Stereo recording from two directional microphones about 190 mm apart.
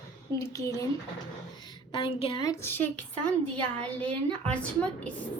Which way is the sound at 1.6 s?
25° left (ahead or behind).